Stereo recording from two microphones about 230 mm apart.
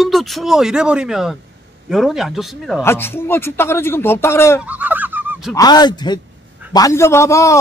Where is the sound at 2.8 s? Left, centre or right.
Centre.